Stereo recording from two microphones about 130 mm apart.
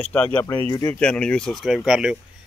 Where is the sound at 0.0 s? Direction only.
10° left (ahead or behind).